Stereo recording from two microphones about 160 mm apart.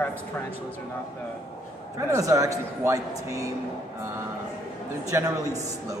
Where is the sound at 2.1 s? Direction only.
20° right (ahead or behind).